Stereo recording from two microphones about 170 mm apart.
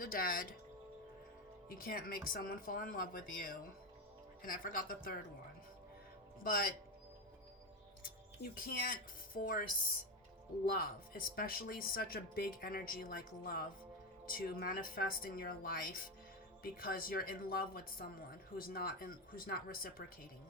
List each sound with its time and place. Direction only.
0.0 s speech: 60° left (ahead or behind)
1.8 s speech: 60° left (ahead or behind)
6.4 s speech: 60° left (ahead or behind)
8.5 s speech: 60° left (ahead or behind)
10.7 s speech: 60° left (ahead or behind)